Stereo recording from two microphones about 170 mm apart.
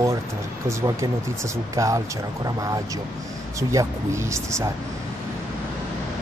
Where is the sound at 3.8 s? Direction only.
20° right (ahead or behind).